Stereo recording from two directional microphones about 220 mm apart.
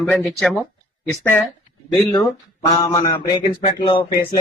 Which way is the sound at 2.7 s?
15° left (ahead or behind).